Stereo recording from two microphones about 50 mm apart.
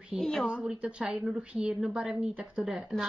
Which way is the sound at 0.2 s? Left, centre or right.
Centre.